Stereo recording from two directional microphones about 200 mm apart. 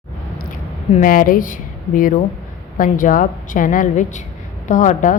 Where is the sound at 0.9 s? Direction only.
45° left (ahead or behind).